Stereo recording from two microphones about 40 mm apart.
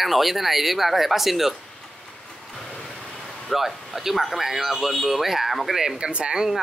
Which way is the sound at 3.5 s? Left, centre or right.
Centre.